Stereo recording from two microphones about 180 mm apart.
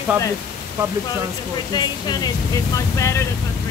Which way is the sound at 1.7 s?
25° left (ahead or behind).